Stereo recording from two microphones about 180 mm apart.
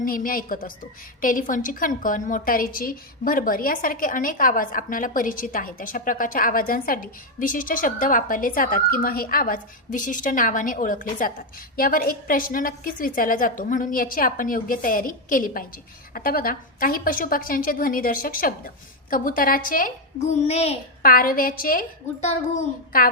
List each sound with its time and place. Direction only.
0.0 s a woman's voice: 50° left (ahead or behind)
20.3 s a child's voice: 35° left (ahead or behind)
21.0 s a woman's voice: 55° left (ahead or behind)